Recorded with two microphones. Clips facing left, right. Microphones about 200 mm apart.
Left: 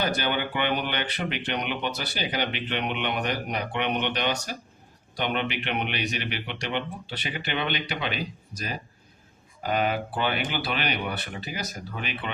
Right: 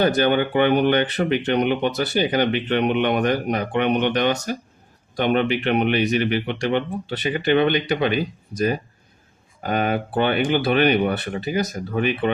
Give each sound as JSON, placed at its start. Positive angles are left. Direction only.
{"t": 0.2, "sound": "speech", "side_deg": -45}